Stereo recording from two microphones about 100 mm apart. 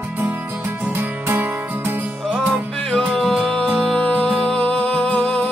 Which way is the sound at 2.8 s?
5° left (ahead or behind).